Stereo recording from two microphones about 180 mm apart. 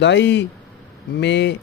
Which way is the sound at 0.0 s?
80° left.